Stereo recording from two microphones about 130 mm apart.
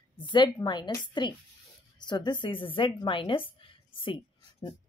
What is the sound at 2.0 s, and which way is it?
A woman's voice, 35° left (ahead or behind).